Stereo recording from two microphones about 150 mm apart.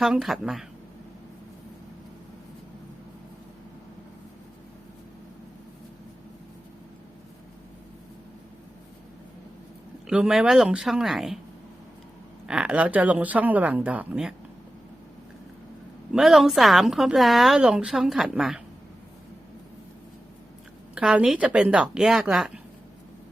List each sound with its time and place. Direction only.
0.0 s a woman's voice: centre (ahead or behind)
10.1 s a woman's voice: 5° right (ahead or behind)
12.5 s speech: 5° right (ahead or behind)
16.1 s a woman's voice: centre (ahead or behind)
20.9 s speech: 5° right (ahead or behind)